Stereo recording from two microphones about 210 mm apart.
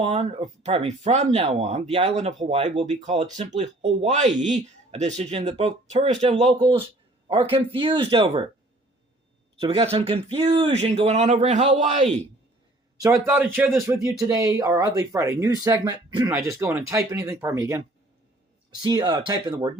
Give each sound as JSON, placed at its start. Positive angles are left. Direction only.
{"t": 0.0, "sound": "speech", "side_deg": -30}
{"t": 6.6, "sound": "speech", "side_deg": -20}
{"t": 9.6, "sound": "speech", "side_deg": -25}
{"t": 13.2, "sound": "speech", "side_deg": -10}
{"t": 13.8, "sound": "speech", "side_deg": -15}